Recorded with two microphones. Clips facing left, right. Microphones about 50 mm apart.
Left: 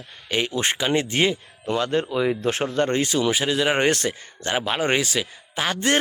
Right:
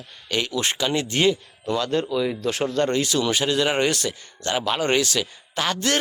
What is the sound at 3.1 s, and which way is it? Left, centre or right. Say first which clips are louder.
Speech: even; centre.